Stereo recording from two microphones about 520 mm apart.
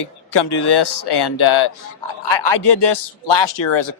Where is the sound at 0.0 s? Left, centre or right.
Left.